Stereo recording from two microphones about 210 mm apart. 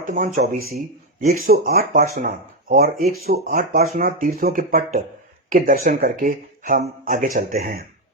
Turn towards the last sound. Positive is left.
turn(degrees=-45)  # may be behind; listen again after turning